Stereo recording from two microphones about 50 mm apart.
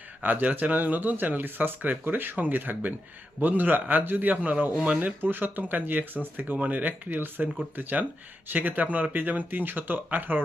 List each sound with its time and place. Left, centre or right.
0.2 s speech: right
4.7 s speech: right
4.9 s speech: right
7.4 s speech: centre
7.8 s speech: right